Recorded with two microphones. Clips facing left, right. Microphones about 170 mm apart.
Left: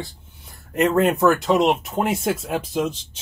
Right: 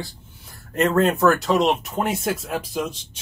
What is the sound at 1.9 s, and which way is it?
Speech, 25° left (ahead or behind).